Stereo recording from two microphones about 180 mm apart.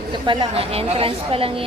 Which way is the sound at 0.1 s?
30° right (ahead or behind).